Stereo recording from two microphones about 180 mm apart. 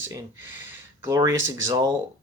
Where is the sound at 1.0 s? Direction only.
15° right (ahead or behind).